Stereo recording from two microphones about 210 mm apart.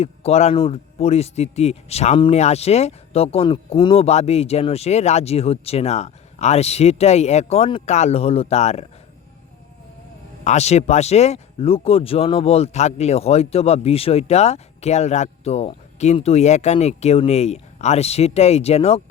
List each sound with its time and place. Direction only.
0.0 s a man's voice: 30° left (ahead or behind)
10.4 s speech: 30° left (ahead or behind)